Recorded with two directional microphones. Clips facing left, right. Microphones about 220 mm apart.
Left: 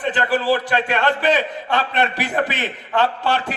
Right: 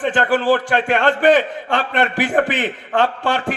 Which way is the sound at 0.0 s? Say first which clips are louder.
Right 3 dB; 50° right (ahead or behind).